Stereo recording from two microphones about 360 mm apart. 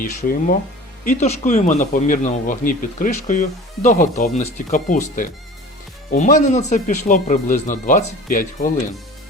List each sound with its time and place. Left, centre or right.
0.0 s speech: left